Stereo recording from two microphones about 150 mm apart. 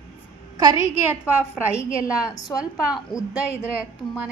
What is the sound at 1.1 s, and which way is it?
A woman's voice, 10° right (ahead or behind).